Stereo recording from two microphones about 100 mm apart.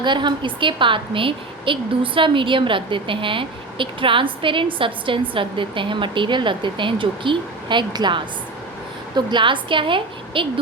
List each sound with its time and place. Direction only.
0.0 s a woman's voice: 50° right (ahead or behind)